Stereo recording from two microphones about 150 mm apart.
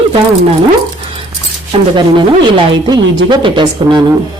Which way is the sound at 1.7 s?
40° right (ahead or behind).